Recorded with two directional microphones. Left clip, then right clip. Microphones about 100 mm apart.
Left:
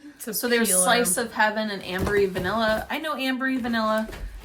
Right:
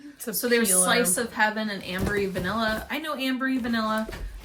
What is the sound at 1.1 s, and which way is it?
A woman's voice, 45° left (ahead or behind).